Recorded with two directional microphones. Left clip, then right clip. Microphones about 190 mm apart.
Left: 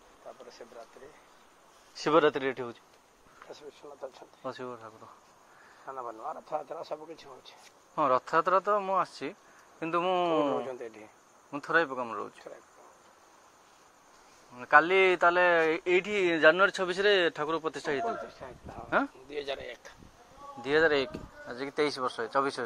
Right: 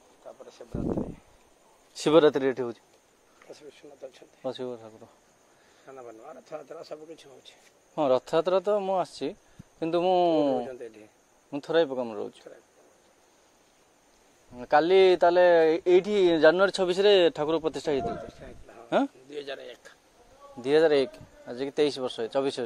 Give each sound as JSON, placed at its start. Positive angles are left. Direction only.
{"t": 0.6, "sound": "speech", "side_deg": -15}
{"t": 2.0, "sound": "speech", "side_deg": -65}
{"t": 5.9, "sound": "speech", "side_deg": 15}
{"t": 6.4, "sound": "speech", "side_deg": -35}
{"t": 7.9, "sound": "speech", "side_deg": -60}
{"t": 10.3, "sound": "speech", "side_deg": -20}
{"t": 11.6, "sound": "speech", "side_deg": -55}
{"t": 14.6, "sound": "speech", "side_deg": -60}
{"t": 19.3, "sound": "speech", "side_deg": -30}
{"t": 20.6, "sound": "speech", "side_deg": -55}